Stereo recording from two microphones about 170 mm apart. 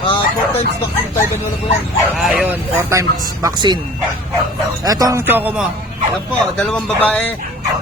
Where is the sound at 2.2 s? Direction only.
5° right (ahead or behind); by 3.8 s 25° right (ahead or behind).